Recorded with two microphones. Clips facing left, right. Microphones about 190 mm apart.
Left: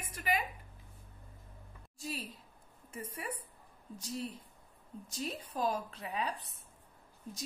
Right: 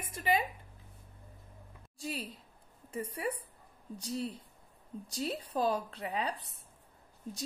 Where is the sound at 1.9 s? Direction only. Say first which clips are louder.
Right 3 dB; 30° right (ahead or behind).